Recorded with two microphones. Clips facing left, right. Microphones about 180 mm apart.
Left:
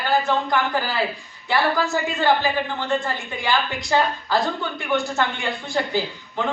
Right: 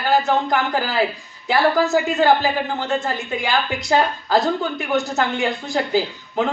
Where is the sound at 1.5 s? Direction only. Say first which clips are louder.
Right 4 dB; 40° right (ahead or behind).